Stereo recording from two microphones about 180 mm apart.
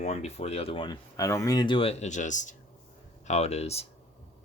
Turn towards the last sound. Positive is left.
turn(degrees=35)  # may be behind; listen again after turning